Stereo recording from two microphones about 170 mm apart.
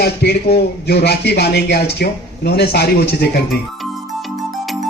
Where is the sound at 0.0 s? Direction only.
70° left (ahead or behind).